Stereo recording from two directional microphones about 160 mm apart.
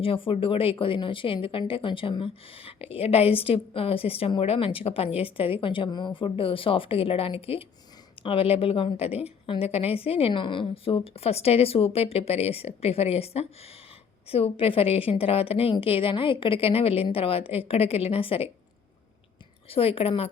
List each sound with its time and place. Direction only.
0.0 s a woman's voice: 35° left (ahead or behind)
19.6 s a woman's voice: 35° left (ahead or behind)